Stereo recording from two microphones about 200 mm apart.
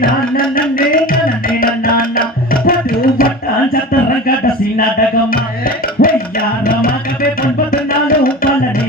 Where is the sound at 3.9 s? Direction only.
45° left (ahead or behind).